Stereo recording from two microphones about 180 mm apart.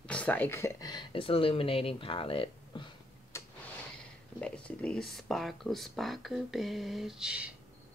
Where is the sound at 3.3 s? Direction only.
15° left (ahead or behind).